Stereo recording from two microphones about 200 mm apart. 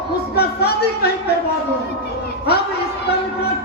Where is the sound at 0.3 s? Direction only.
50° left (ahead or behind).